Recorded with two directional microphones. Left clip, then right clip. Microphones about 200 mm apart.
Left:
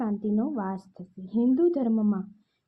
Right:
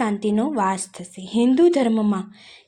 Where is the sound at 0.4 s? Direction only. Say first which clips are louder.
Right 11 dB; 25° right (ahead or behind).